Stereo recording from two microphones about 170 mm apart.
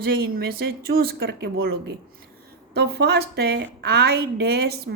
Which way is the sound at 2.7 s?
70° right (ahead or behind).